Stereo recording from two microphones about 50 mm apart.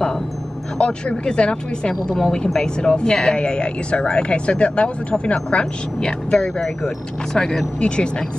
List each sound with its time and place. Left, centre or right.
0.7 s speech: centre